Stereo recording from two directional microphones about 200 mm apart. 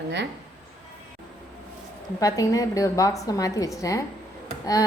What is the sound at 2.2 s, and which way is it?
A woman's voice, 15° left (ahead or behind).